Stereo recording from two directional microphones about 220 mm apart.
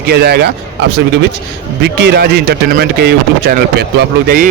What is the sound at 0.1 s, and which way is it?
Speech, 45° right (ahead or behind).